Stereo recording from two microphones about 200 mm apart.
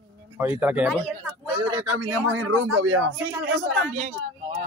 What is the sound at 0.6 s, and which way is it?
Speech, 10° right (ahead or behind).